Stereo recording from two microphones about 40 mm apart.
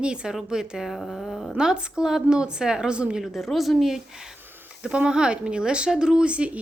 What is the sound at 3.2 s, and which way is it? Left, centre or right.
Speech, centre.